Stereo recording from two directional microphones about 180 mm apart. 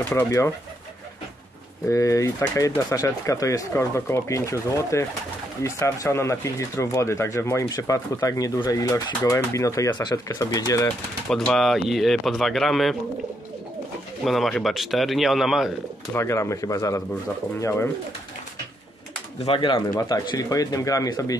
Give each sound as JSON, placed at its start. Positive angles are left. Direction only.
{"t": 0.1, "sound": "speech", "side_deg": 15}
{"t": 1.9, "sound": "speech", "side_deg": 15}
{"t": 11.2, "sound": "speech", "side_deg": 0}
{"t": 14.2, "sound": "speech", "side_deg": 0}
{"t": 16.1, "sound": "speech", "side_deg": 15}
{"t": 19.4, "sound": "speech", "side_deg": 30}